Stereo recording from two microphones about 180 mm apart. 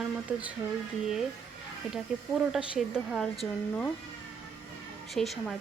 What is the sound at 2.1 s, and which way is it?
A woman's voice, 5° right (ahead or behind).